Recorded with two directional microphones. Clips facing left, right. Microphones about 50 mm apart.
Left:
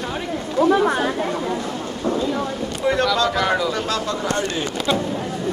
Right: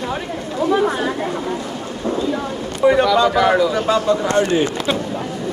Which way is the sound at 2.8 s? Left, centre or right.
Centre.